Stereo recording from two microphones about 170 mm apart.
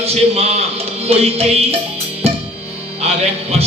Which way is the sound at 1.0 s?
35° right (ahead or behind).